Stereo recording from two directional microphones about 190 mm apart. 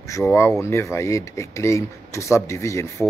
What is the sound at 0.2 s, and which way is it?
Speech, 10° left (ahead or behind).